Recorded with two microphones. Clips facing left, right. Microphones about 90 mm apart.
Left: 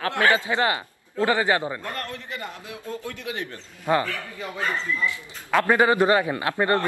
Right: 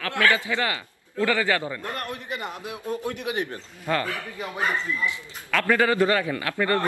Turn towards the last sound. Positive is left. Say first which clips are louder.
# left 2 dB
turn(degrees=25)  # may be behind; listen again after turning